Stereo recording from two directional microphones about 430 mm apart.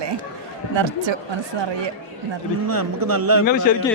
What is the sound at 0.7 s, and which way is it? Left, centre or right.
Speech, right.